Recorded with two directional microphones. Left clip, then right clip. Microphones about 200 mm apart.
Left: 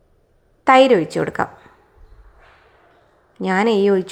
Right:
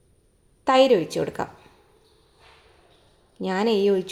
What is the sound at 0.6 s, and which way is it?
Speech, 15° left (ahead or behind).